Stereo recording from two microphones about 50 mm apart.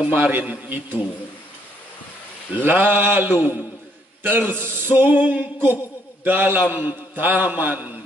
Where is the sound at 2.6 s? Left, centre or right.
Right.